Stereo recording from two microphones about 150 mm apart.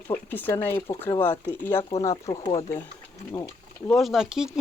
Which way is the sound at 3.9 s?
Centre (ahead or behind).